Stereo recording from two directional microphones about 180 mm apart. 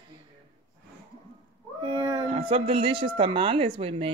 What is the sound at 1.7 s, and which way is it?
Speech, 25° right (ahead or behind).